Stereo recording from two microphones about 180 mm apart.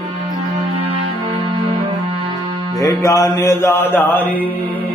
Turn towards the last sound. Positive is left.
turn(degrees=10)  # may be behind; listen again after turning